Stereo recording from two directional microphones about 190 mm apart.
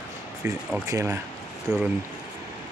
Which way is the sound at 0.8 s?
15° right (ahead or behind).